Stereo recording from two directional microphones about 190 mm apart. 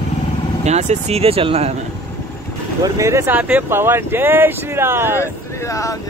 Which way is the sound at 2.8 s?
15° right (ahead or behind).